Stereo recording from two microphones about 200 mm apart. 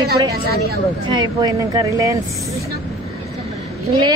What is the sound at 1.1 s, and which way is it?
Speech, 20° right (ahead or behind).